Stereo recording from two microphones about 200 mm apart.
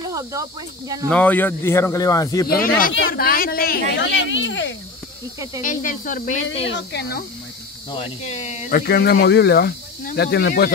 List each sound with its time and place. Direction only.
0.0 s speech: 15° right (ahead or behind)
1.1 s speech: 10° left (ahead or behind)
2.4 s speech: 45° left (ahead or behind); by 4.7 s 65° left (ahead or behind)
5.6 s speech: 40° left (ahead or behind)
6.5 s speech: 65° left (ahead or behind)
7.9 s speech: 30° left (ahead or behind); by 10.7 s 50° left (ahead or behind)